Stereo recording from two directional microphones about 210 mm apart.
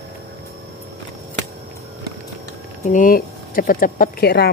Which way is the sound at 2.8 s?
40° left (ahead or behind).